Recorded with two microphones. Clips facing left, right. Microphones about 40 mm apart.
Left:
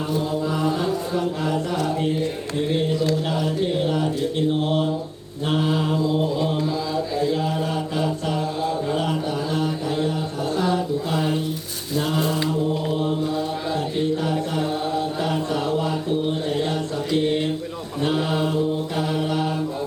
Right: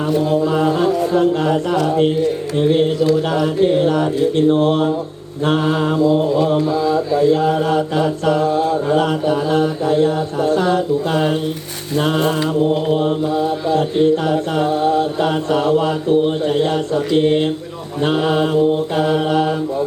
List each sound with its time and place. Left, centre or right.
0.1 s mantra: right
0.4 s chant: right
1.8 s mantra: right
6.3 s mantra: right
6.6 s mantra: right
7.2 s mantra: right
13.2 s mantra: right
13.7 s mantra: right